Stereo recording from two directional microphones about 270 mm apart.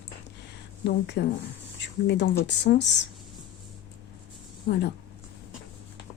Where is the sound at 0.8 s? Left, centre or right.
Left.